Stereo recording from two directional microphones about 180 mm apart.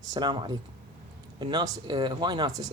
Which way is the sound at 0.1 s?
25° right (ahead or behind).